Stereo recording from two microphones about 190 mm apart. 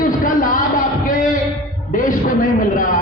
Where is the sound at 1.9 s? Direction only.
45° left (ahead or behind).